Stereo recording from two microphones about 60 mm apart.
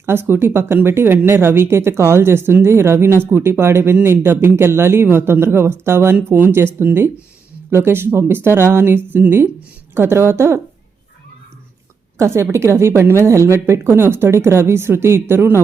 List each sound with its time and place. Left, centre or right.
0.0 s speech: right
7.7 s speech: right
12.1 s speech: right